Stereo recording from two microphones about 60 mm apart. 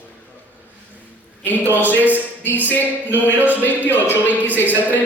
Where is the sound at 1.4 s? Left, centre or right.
Left.